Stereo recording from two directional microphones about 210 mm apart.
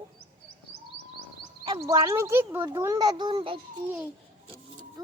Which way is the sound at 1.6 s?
25° right (ahead or behind).